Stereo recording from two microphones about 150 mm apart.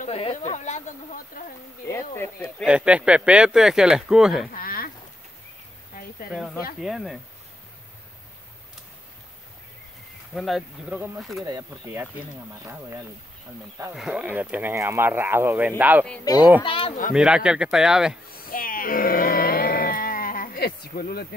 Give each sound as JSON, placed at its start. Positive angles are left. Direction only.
{"t": 0.1, "sound": "speech", "side_deg": 40}
{"t": 1.9, "sound": "speech", "side_deg": 15}
{"t": 2.6, "sound": "speech", "side_deg": -5}
{"t": 4.6, "sound": "a sound", "side_deg": 75}
{"t": 6.8, "sound": "speech", "side_deg": 0}
{"t": 10.3, "sound": "speech", "side_deg": 0}
{"t": 11.4, "sound": "speech", "side_deg": -25}
{"t": 13.9, "sound": "speech", "side_deg": -5}
{"t": 16.6, "sound": "speech", "side_deg": 35}
{"t": 17.1, "sound": "speech", "side_deg": -5}
{"t": 18.4, "sound": "a sound", "side_deg": 70}